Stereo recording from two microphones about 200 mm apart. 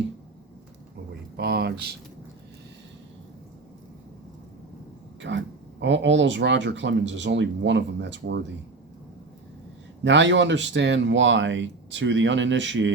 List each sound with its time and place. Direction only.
1.4 s speech: 55° right (ahead or behind)
5.2 s speech: 65° right (ahead or behind)
10.0 s speech: 65° right (ahead or behind)